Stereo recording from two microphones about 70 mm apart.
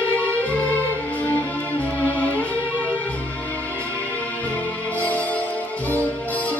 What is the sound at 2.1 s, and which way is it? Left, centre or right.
Music, left.